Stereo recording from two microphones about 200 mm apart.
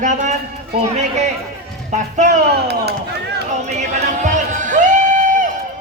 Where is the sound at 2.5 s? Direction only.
55° right (ahead or behind).